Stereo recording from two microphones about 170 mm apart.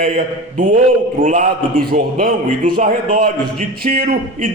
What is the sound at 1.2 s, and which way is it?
A man's voice, 50° right (ahead or behind).